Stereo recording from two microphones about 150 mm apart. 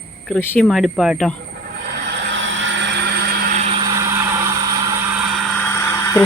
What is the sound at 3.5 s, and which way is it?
Vehicle, 45° right (ahead or behind).